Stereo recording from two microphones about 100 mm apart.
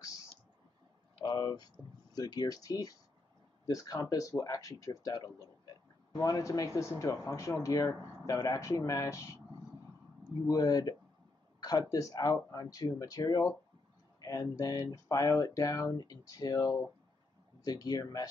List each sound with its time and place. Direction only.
1.2 s a sound: 45° left (ahead or behind)
2.1 s speech: 45° left (ahead or behind)
10.4 s speech: 40° left (ahead or behind)